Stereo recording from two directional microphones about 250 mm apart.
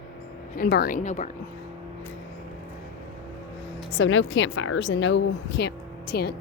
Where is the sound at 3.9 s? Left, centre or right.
Left.